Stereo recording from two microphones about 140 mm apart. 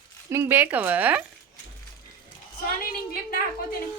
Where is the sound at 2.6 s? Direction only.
90° left.